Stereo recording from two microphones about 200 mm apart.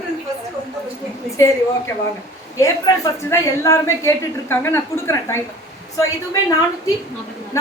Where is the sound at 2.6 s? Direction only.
15° left (ahead or behind).